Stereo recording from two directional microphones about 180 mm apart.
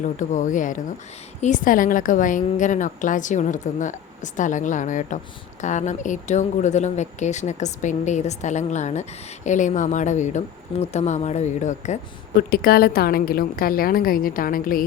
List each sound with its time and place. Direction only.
0.0 s a woman's voice: 45° left (ahead or behind)
12.4 s a woman's voice: 55° left (ahead or behind)